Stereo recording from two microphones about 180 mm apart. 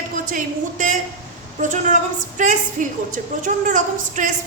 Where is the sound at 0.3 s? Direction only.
50° right (ahead or behind).